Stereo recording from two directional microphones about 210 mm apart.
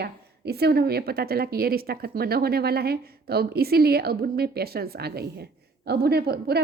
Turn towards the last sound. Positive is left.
turn(degrees=-50)  # may be behind; listen again after turning